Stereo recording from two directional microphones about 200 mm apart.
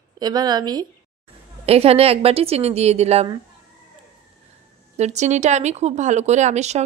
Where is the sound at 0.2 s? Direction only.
20° right (ahead or behind).